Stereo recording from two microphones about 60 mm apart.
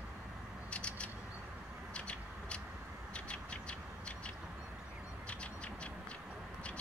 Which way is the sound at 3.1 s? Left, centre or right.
Centre.